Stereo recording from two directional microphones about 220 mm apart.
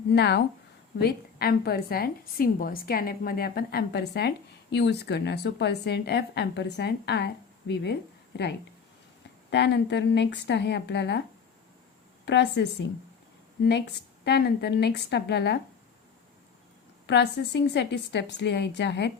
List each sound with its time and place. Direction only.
0.1 s a woman's voice: 50° left (ahead or behind)
9.5 s a woman's voice: 50° left (ahead or behind)
12.2 s a woman's voice: 50° left (ahead or behind)
17.1 s a woman's voice: 50° left (ahead or behind)